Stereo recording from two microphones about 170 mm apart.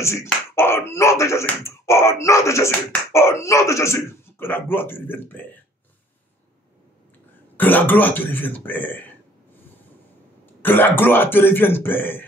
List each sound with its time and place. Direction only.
0.0 s speech: 15° left (ahead or behind)
7.5 s speech: 10° left (ahead or behind)
10.6 s speech: 10° left (ahead or behind)